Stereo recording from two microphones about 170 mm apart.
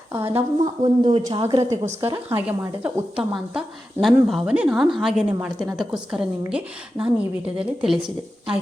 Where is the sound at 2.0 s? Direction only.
15° right (ahead or behind).